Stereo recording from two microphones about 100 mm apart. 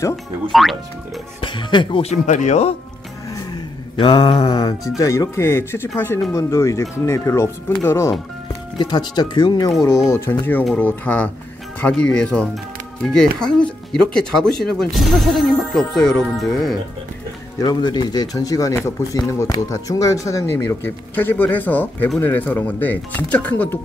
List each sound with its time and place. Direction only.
0.1 s speech: centre (ahead or behind)
1.4 s speech: 50° left (ahead or behind)
3.9 s mantra: 55° left (ahead or behind)
4.4 s speech: 40° left (ahead or behind)
8.7 s speech: 45° left (ahead or behind); by 16.7 s centre (ahead or behind)
17.6 s speech: 45° left (ahead or behind); by 23.8 s 15° left (ahead or behind)